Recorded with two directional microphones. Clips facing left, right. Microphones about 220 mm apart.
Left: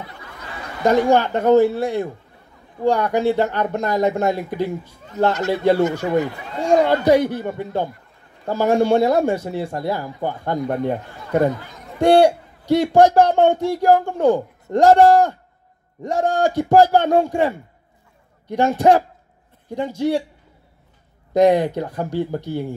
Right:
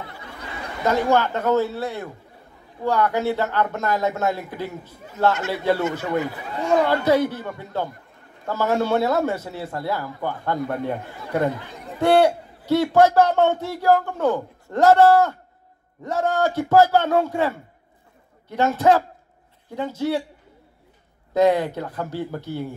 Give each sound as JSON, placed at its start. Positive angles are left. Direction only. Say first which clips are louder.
{"t": 0.8, "sound": "a man's voice", "louder": "left 4 dB", "side_deg": 15}
{"t": 6.1, "sound": "speech", "louder": "left 4 dB", "side_deg": 30}
{"t": 6.9, "sound": "a man's voice", "louder": "left 4 dB", "side_deg": 15}
{"t": 12.0, "sound": "a man's voice", "louder": "left 4 dB", "side_deg": 15}
{"t": 21.3, "sound": "a man's voice", "louder": "left 3 dB", "side_deg": 15}